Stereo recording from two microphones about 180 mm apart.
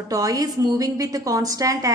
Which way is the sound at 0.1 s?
20° right (ahead or behind).